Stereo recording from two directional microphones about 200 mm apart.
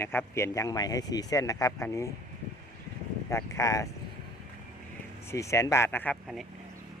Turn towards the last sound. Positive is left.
turn(degrees=0)  # may be behind; listen again after turning